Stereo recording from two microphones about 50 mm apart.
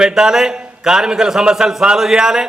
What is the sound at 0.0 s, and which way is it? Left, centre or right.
A man's voice, centre.